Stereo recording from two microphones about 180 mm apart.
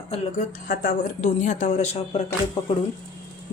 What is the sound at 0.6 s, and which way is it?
Speech, 50° left (ahead or behind).